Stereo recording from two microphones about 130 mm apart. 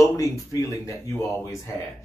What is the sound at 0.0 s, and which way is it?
Speech, 25° left (ahead or behind).